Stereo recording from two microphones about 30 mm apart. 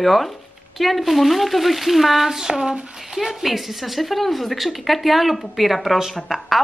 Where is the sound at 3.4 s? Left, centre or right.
Centre.